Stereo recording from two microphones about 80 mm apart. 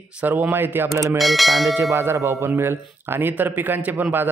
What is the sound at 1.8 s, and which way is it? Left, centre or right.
Speech, right.